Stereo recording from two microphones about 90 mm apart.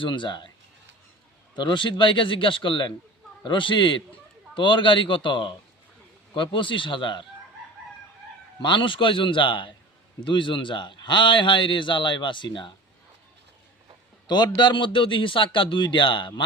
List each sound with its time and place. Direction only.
0.0 s a man's voice: 60° left (ahead or behind)
1.5 s a man's voice: 60° left (ahead or behind)
8.6 s a man's voice: 65° left (ahead or behind)
14.3 s a man's voice: 55° left (ahead or behind)